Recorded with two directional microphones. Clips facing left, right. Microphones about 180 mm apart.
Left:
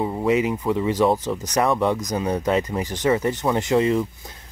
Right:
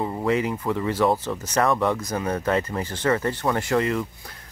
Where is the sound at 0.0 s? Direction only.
5° left (ahead or behind).